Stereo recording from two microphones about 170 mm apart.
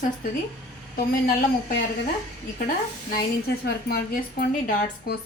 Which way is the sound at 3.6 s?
65° left (ahead or behind).